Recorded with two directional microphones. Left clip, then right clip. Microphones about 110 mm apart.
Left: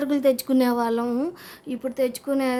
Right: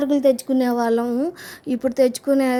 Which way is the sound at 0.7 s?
25° right (ahead or behind).